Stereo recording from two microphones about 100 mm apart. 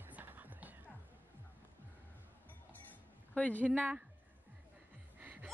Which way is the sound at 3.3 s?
15° left (ahead or behind).